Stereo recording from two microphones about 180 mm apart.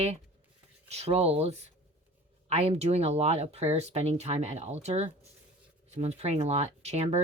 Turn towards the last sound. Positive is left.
turn(degrees=-35)  # may be behind; listen again after turning